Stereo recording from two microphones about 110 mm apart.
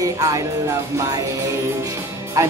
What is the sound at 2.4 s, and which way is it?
Speech, 30° right (ahead or behind).